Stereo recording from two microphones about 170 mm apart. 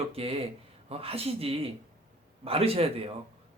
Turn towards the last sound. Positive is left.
turn(degrees=-35)  # may be behind; listen again after turning